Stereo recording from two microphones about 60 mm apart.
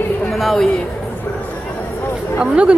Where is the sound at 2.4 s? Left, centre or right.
Centre.